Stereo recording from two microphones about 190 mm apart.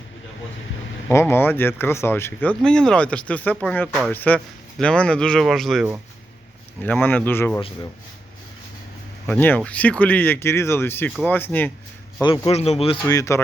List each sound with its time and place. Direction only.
1.1 s speech: 10° left (ahead or behind)
9.2 s speech: 10° left (ahead or behind)
12.2 s a man's voice: 25° left (ahead or behind)
13.1 s speech: 15° left (ahead or behind)